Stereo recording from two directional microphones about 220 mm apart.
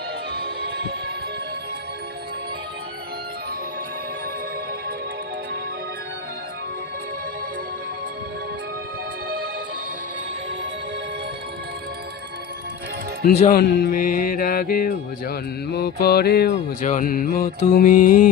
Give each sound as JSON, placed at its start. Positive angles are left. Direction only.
{"t": 0.3, "sound": "music", "side_deg": -45}
{"t": 13.2, "sound": "speech", "side_deg": 30}
{"t": 13.5, "sound": "music", "side_deg": 45}
{"t": 16.8, "sound": "mantra", "side_deg": 35}